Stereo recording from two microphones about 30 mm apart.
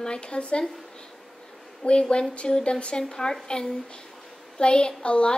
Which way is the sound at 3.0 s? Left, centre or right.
Left.